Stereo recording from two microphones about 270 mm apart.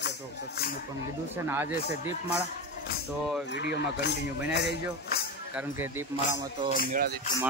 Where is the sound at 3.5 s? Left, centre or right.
Left.